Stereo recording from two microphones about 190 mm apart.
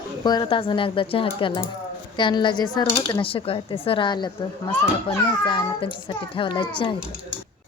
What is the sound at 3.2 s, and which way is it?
A woman's voice, 30° left (ahead or behind).